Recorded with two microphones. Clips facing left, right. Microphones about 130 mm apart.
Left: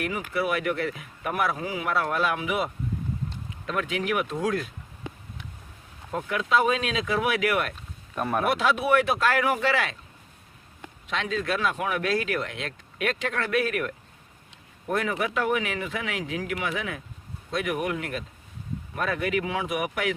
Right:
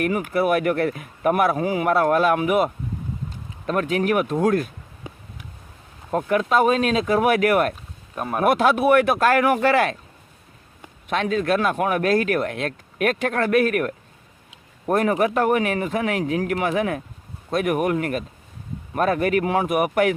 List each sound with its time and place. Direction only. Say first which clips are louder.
0.0 s speech: right 7 dB; 50° right (ahead or behind)
6.1 s speech: right 6 dB; 50° right (ahead or behind)
8.1 s speech: right 2 dB; 5° right (ahead or behind)
8.4 s speech: right 8 dB; 50° right (ahead or behind)
11.1 s speech: right 7 dB; 55° right (ahead or behind)